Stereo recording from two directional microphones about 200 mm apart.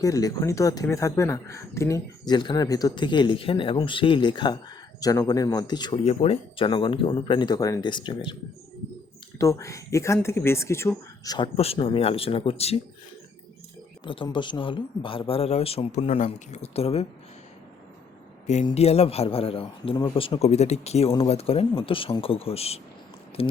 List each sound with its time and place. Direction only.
0.0 s speech: 15° left (ahead or behind)
9.4 s speech: 15° left (ahead or behind)
11.5 s speech: 30° left (ahead or behind)
14.0 s speech: 25° left (ahead or behind)
18.6 s speech: 30° left (ahead or behind)